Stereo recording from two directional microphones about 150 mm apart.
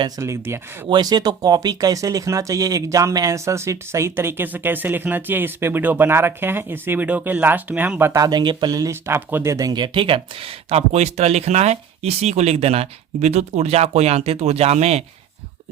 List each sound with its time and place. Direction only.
0.2 s speech: 20° right (ahead or behind)
0.9 s speech: 30° right (ahead or behind); by 15.0 s 45° right (ahead or behind)